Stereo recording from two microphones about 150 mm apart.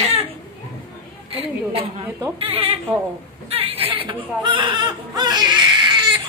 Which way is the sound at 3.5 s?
40° right (ahead or behind).